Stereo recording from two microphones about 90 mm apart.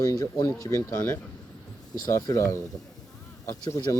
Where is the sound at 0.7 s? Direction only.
30° left (ahead or behind).